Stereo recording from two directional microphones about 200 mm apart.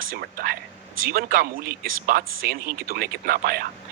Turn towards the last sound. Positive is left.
turn(degrees=-45)  # may be behind; listen again after turning